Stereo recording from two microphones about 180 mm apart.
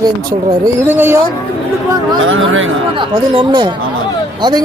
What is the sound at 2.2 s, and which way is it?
Speech, 90° right.